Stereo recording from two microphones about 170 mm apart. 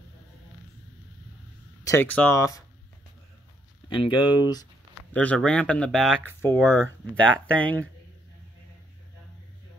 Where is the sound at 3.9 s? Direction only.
30° left (ahead or behind).